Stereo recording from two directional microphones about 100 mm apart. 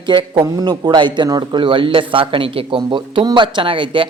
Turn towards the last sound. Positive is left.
turn(degrees=-55)  # may be behind; listen again after turning